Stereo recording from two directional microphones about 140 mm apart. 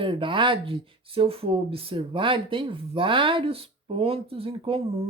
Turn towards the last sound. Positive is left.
turn(degrees=-40)  # may be behind; listen again after turning